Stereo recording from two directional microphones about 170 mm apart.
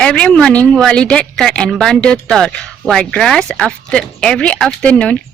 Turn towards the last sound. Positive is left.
turn(degrees=5)  # may be behind; listen again after turning